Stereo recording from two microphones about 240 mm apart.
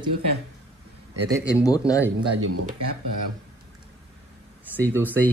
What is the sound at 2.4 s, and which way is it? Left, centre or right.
Speech, right.